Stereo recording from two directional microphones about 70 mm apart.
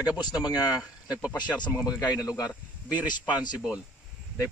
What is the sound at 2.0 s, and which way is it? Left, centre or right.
Speech, left.